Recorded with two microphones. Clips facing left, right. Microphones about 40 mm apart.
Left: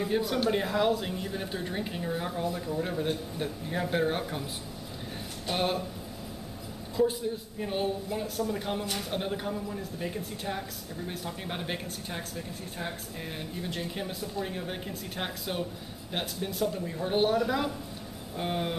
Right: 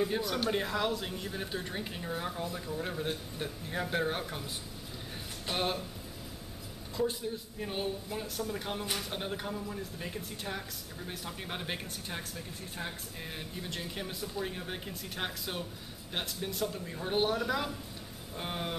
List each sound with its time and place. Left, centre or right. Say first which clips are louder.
0.0 s speech: left 4 dB; centre
5.5 s speech: left 4 dB; centre
7.0 s a man's voice: left 6 dB; centre